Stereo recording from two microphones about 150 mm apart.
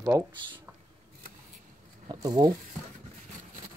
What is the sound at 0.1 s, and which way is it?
Speech, 20° right (ahead or behind).